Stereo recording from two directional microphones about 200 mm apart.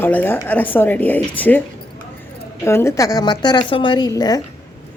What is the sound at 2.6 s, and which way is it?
A woman's voice, 15° left (ahead or behind).